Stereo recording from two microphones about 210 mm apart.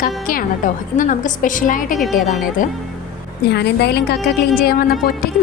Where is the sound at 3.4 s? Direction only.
55° left (ahead or behind).